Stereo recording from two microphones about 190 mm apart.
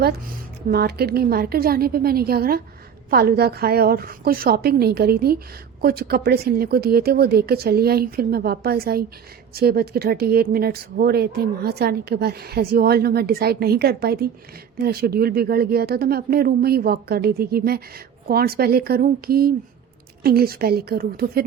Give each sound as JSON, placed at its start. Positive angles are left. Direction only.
{"t": 0.7, "sound": "speech", "side_deg": -55}